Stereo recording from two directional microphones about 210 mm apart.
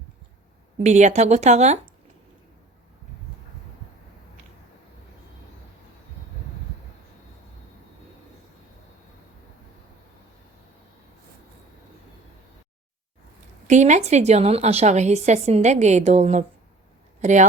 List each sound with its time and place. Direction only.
0.8 s a woman's voice: 35° right (ahead or behind)
13.7 s a woman's voice: 35° right (ahead or behind)